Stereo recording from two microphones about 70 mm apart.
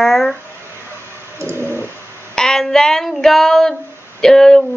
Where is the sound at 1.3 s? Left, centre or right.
Right.